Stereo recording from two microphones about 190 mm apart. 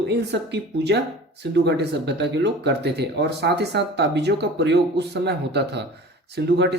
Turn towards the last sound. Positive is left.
turn(degrees=-60)  # may be behind; listen again after turning